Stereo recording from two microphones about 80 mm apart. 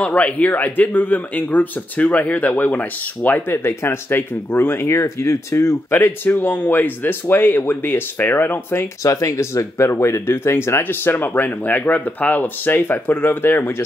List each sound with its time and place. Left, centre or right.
0.0 s speech: centre
9.0 s speech: left